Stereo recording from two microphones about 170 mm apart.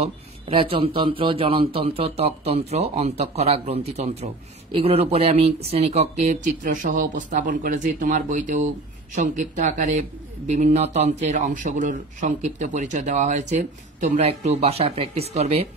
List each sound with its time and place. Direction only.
0.0 s a man's voice: 30° right (ahead or behind)